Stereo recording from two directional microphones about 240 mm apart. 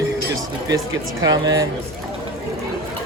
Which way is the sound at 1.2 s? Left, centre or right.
Centre.